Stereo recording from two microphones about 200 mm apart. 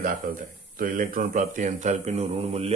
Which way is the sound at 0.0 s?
45° right (ahead or behind).